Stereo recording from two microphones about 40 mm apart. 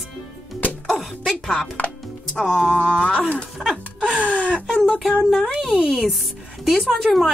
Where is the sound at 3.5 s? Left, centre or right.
Centre.